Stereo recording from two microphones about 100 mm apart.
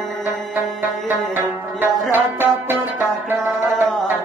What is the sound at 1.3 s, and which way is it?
Music, 20° right (ahead or behind).